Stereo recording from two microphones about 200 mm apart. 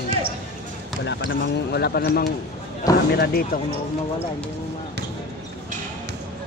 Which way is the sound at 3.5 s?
45° left (ahead or behind).